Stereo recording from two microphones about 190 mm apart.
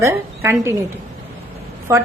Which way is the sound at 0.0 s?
15° right (ahead or behind).